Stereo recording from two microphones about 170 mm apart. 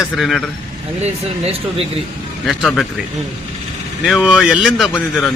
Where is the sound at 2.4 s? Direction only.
Centre (ahead or behind).